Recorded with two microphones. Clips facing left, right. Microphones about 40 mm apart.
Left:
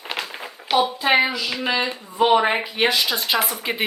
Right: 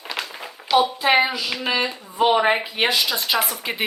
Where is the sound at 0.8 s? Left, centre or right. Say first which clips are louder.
Even; centre.